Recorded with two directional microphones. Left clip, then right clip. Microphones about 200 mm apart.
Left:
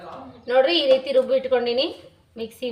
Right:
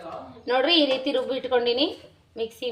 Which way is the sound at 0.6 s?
45° right (ahead or behind).